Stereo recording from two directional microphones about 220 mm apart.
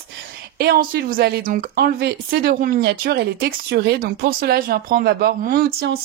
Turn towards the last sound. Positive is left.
turn(degrees=-45)  # may be behind; listen again after turning